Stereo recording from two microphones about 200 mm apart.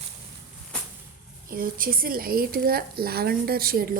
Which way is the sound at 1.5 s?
45° right (ahead or behind).